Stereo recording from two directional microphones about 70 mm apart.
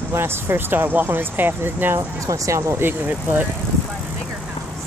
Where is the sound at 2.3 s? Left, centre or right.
Right.